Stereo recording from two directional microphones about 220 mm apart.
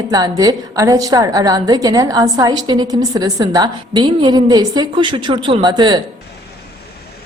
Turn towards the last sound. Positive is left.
turn(degrees=-20)  # may be behind; listen again after turning